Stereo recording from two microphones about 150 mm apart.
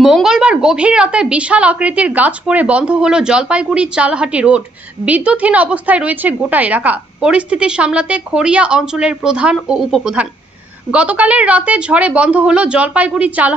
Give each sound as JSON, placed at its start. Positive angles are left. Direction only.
{"t": 0.0, "sound": "a woman's voice", "side_deg": -5}